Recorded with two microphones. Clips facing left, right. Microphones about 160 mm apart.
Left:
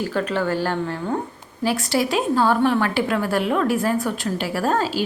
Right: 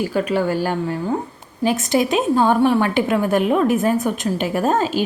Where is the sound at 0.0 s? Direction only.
10° right (ahead or behind).